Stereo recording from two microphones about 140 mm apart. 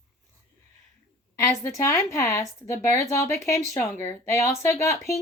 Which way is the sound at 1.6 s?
20° left (ahead or behind).